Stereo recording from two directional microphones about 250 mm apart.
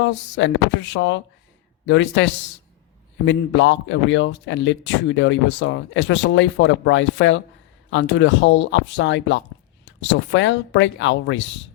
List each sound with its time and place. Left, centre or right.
0.0 s speech: left